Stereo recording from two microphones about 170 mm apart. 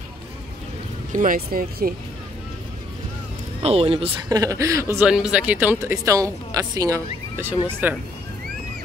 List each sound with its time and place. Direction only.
1.1 s speech: 55° right (ahead or behind)
3.6 s speech: 35° right (ahead or behind)
4.3 s speech: 20° right (ahead or behind)
5.0 s speech: 5° right (ahead or behind)